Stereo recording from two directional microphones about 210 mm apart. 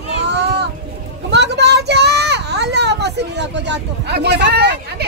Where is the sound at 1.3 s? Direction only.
55° right (ahead or behind).